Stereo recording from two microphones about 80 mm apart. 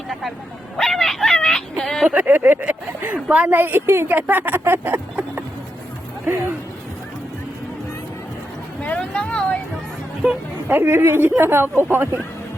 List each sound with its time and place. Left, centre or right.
0.1 s dog: centre
1.8 s a sound: centre
2.0 s speech: right
3.6 s speech: right
8.8 s speech: centre
10.7 s speech: right